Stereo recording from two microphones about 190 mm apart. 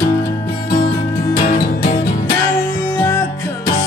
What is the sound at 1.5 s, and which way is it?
Music, 50° left (ahead or behind).